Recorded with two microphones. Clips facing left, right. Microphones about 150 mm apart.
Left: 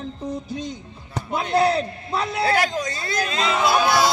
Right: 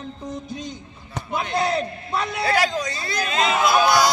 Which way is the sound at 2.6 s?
50° left (ahead or behind).